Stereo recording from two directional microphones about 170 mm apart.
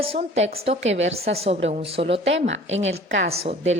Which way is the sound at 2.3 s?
90° right.